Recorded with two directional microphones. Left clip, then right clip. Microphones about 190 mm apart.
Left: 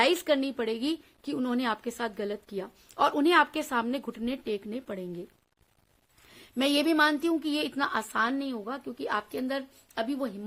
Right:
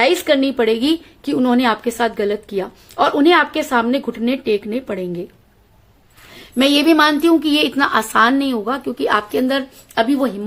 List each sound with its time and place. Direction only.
0.0 s speech: 35° left (ahead or behind)
6.3 s a woman's voice: 35° left (ahead or behind)